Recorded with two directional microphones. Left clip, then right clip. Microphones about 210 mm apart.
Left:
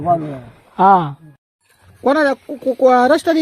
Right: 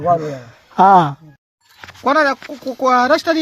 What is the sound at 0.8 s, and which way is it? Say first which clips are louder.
Speech: right 2 dB; 55° right (ahead or behind).